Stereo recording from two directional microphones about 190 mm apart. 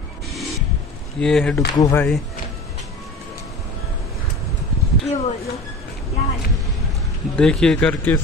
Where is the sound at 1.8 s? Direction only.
15° left (ahead or behind).